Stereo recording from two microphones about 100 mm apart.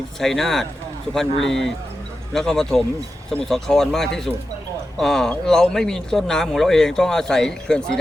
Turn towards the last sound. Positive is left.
turn(degrees=5)  # may be behind; listen again after turning